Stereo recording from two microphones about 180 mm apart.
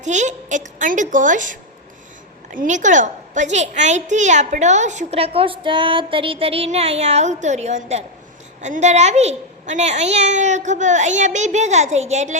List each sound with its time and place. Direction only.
0.0 s a woman's voice: 40° right (ahead or behind)